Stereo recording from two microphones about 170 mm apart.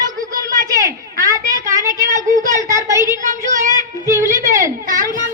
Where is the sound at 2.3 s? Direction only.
50° right (ahead or behind).